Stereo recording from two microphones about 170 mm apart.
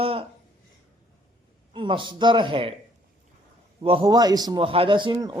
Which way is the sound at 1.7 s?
30° right (ahead or behind).